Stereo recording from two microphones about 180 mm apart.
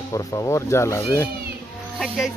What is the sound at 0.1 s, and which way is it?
Speech, 20° left (ahead or behind).